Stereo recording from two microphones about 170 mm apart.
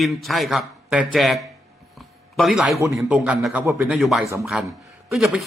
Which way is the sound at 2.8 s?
20° right (ahead or behind).